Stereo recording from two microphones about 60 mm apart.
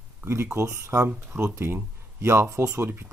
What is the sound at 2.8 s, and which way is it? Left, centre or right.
Speech, right.